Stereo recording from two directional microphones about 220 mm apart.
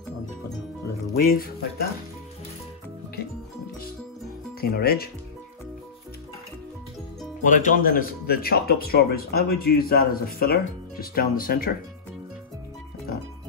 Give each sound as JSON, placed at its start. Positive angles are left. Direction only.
{"t": 1.2, "sound": "music", "side_deg": 40}
{"t": 4.6, "sound": "speech", "side_deg": 45}
{"t": 7.4, "sound": "speech", "side_deg": 35}